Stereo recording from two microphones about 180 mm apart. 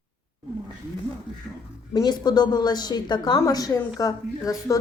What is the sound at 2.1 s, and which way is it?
A woman's voice, 25° left (ahead or behind).